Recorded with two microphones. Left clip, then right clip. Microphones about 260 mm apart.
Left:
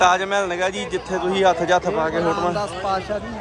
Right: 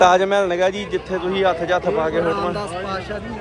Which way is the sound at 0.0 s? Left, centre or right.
Centre.